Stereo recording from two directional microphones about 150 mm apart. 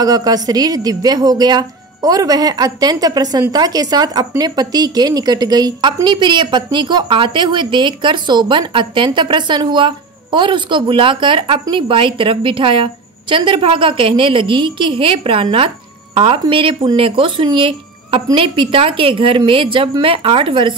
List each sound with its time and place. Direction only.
0.0 s a woman's voice: 25° right (ahead or behind)